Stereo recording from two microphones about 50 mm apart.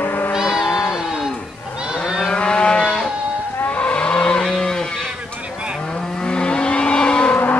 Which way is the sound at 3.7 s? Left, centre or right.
Left.